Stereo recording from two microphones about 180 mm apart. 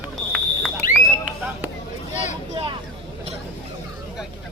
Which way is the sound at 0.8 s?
50° left (ahead or behind).